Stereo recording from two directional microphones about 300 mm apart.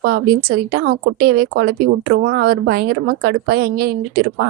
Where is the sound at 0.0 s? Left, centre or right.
Right.